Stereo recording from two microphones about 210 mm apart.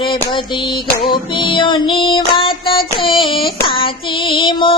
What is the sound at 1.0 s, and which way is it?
Music, 20° left (ahead or behind).